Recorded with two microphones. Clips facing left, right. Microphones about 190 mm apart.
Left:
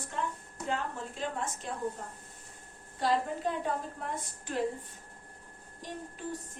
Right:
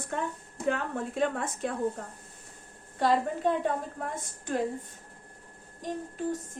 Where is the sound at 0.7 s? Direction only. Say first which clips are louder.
Right 5 dB; 60° right (ahead or behind).